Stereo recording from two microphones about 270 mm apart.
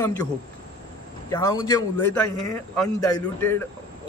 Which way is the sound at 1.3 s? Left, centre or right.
Centre.